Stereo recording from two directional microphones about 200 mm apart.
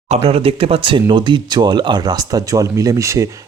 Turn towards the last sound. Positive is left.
turn(degrees=-15)  # may be behind; listen again after turning